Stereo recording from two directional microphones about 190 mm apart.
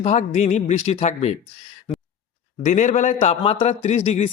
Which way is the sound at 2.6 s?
40° left (ahead or behind).